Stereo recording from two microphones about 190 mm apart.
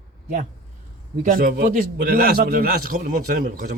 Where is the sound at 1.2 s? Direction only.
50° right (ahead or behind).